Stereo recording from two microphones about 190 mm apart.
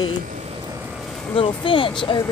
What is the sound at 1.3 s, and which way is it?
Speech, 25° left (ahead or behind).